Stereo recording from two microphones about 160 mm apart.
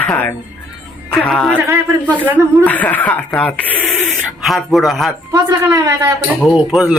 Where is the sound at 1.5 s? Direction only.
15° right (ahead or behind).